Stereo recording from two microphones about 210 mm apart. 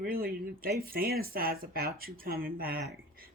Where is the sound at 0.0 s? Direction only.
45° right (ahead or behind).